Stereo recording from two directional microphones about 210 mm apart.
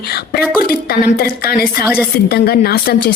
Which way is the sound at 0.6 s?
45° left (ahead or behind).